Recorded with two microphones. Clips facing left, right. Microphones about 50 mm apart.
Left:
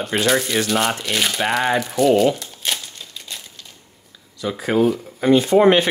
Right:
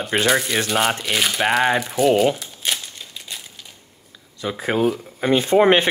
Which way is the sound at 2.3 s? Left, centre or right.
Centre.